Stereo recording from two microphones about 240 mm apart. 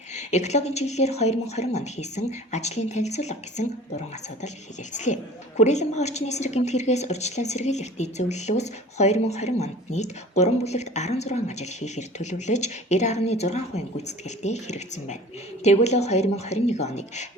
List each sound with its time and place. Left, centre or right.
0.1 s a woman's voice: left